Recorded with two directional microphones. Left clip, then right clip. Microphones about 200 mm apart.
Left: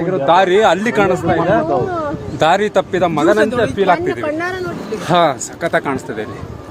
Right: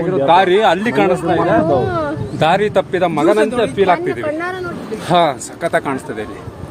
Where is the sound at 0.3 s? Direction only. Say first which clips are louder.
Even; 10° left (ahead or behind).